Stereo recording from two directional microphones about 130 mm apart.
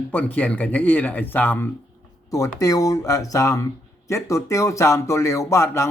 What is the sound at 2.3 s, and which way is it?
Speech, 25° left (ahead or behind).